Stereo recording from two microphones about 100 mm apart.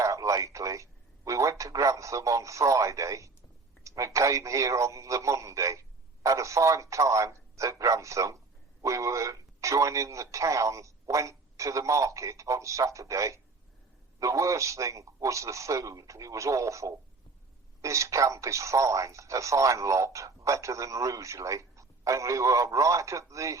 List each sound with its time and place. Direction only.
0.0 s a man's voice: 35° right (ahead or behind)